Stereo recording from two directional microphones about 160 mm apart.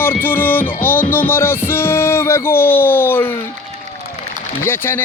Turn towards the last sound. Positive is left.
turn(degrees=15)  # may be behind; listen again after turning